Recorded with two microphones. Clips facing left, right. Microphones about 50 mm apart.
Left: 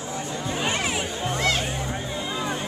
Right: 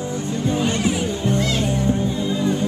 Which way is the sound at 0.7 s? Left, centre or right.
Left.